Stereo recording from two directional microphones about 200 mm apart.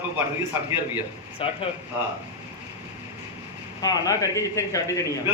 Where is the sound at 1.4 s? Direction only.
25° left (ahead or behind).